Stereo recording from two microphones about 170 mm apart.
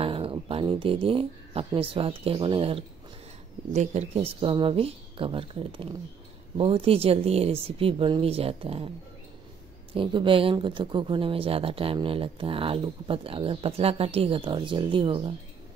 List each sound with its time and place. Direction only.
0.0 s speech: 30° right (ahead or behind)
9.9 s speech: 30° right (ahead or behind)